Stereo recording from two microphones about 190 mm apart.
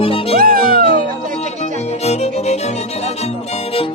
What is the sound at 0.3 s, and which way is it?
Music, 50° right (ahead or behind).